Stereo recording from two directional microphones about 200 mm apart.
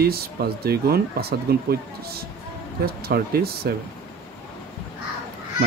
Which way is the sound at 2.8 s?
50° right (ahead or behind).